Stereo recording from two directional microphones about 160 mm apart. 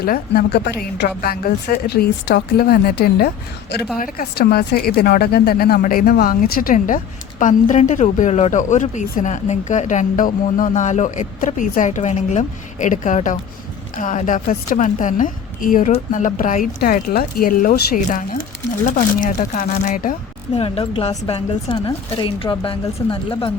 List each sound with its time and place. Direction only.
0.0 s a woman's voice: 75° left (ahead or behind)
3.9 s speech: 60° left (ahead or behind)
20.6 s speech: 35° left (ahead or behind)